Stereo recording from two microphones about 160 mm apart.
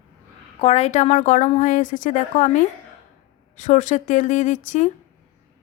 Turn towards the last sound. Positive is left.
turn(degrees=50)  # may be behind; listen again after turning